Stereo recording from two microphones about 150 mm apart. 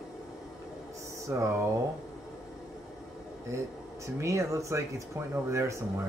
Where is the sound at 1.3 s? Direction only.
20° right (ahead or behind).